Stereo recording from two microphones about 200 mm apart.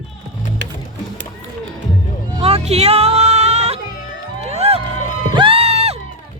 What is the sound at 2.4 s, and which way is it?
Music, 30° right (ahead or behind).